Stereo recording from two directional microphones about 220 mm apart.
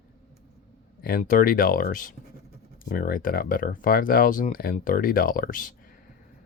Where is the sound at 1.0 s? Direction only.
40° left (ahead or behind).